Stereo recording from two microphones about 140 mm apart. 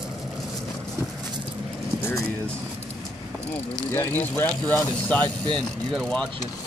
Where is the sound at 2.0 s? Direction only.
15° left (ahead or behind).